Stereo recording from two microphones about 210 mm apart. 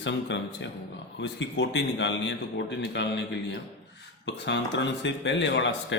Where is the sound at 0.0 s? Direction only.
60° left (ahead or behind).